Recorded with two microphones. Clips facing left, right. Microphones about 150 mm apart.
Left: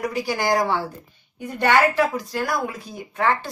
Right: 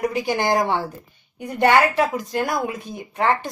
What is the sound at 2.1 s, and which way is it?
A woman's voice, 20° right (ahead or behind).